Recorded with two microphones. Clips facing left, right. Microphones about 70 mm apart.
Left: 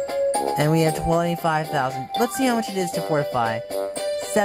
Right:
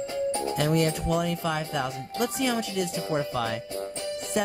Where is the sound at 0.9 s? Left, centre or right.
Left.